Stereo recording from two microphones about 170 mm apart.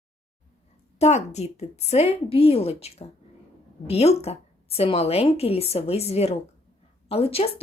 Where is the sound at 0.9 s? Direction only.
40° left (ahead or behind).